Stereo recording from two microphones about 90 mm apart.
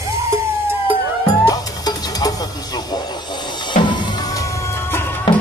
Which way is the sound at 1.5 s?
45° left (ahead or behind).